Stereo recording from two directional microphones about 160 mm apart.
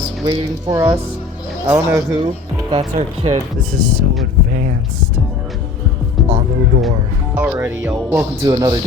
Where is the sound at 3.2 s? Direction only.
30° right (ahead or behind).